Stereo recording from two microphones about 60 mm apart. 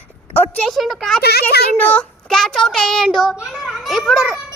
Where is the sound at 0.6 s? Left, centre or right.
Centre.